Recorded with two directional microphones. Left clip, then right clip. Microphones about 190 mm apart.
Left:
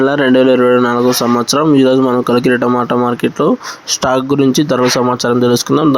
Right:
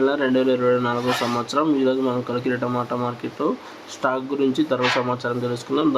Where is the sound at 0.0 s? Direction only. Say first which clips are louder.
Left 9 dB; 45° left (ahead or behind).